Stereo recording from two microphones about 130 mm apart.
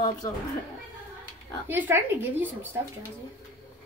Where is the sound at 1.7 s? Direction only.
15° right (ahead or behind).